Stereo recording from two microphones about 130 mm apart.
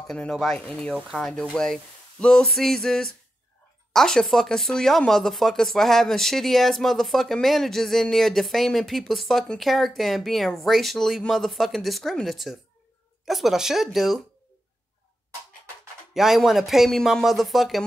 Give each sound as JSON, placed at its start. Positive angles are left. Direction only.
{"t": 0.0, "sound": "speech", "side_deg": 5}
{"t": 16.1, "sound": "speech", "side_deg": -5}